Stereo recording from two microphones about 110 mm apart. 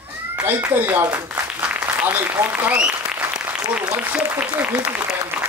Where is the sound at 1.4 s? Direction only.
15° right (ahead or behind).